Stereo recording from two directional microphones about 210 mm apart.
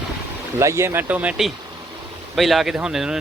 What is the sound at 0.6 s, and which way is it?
Speech, 15° right (ahead or behind).